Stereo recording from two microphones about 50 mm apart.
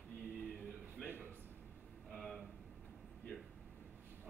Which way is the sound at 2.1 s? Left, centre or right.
Centre.